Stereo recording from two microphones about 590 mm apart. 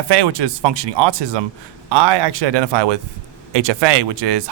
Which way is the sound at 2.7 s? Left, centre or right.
Right.